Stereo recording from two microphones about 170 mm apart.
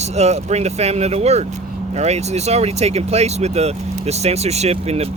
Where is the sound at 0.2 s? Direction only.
40° right (ahead or behind).